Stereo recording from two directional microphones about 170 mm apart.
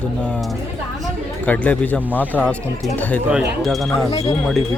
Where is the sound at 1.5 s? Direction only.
10° left (ahead or behind).